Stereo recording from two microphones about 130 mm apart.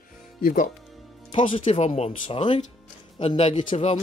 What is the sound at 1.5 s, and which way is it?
Speech, 50° left (ahead or behind).